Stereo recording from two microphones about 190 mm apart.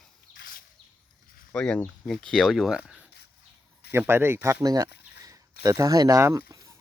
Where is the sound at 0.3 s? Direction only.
50° left (ahead or behind).